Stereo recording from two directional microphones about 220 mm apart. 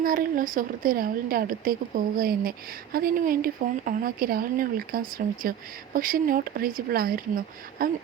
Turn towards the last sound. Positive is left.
turn(degrees=-40)  # may be behind; listen again after turning